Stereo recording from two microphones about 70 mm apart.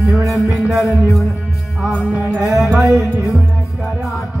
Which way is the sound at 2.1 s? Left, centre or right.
Right.